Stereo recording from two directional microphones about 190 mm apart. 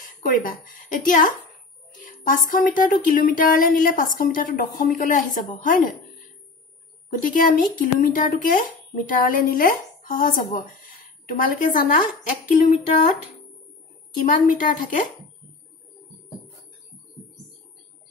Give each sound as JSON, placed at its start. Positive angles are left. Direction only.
{"t": 0.0, "sound": "a woman's voice", "side_deg": 45}
{"t": 7.1, "sound": "speech", "side_deg": 45}
{"t": 14.2, "sound": "speech", "side_deg": 45}